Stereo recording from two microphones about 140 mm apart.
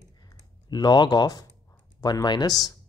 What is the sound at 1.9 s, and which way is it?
Speech, 30° left (ahead or behind).